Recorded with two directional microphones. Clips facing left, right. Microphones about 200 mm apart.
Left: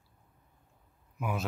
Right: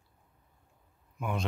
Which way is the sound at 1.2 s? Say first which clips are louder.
Even; 5° left (ahead or behind).